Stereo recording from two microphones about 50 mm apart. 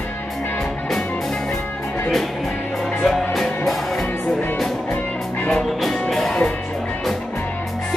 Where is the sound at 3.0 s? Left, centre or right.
Centre.